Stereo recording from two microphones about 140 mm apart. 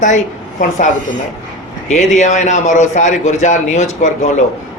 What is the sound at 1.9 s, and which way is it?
A man's voice, 60° left (ahead or behind).